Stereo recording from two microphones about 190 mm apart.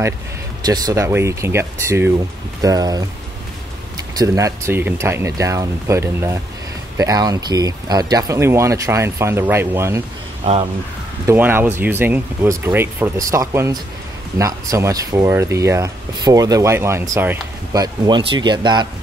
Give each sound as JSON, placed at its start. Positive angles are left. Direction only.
{"t": 0.6, "sound": "speech", "side_deg": -20}
{"t": 4.2, "sound": "speech", "side_deg": -15}
{"t": 10.4, "sound": "speech", "side_deg": -30}
{"t": 11.2, "sound": "speech", "side_deg": -10}